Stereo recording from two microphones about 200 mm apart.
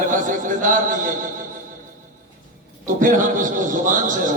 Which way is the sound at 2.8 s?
40° right (ahead or behind).